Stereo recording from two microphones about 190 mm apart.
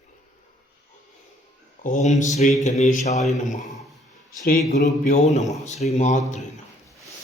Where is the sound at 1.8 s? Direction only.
40° left (ahead or behind).